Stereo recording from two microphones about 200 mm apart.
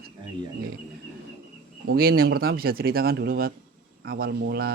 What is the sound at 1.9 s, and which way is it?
Speech, 50° right (ahead or behind).